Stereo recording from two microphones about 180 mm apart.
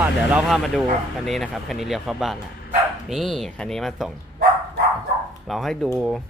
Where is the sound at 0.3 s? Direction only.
Centre (ahead or behind).